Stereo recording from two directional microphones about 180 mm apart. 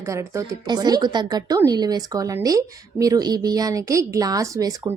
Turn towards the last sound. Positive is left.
turn(degrees=-20)  # may be behind; listen again after turning